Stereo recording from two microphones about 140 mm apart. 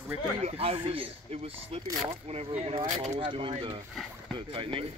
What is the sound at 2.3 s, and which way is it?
Speech, 45° right (ahead or behind).